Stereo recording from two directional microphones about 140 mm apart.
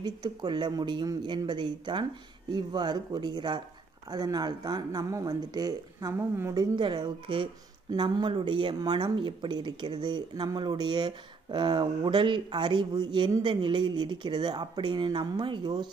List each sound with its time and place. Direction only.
0.0 s speech: 30° right (ahead or behind)